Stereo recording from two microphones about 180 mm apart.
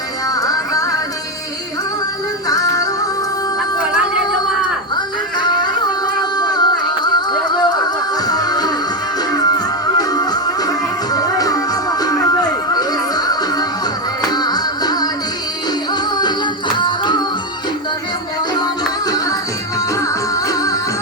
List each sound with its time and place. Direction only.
0.3 s music: 20° left (ahead or behind)
2.5 s music: 20° left (ahead or behind)
4.9 s a sound: 25° left (ahead or behind)
6.3 s music: 20° left (ahead or behind)
18.5 s music: 20° left (ahead or behind)